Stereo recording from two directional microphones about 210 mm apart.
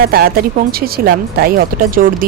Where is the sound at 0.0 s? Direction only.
45° right (ahead or behind).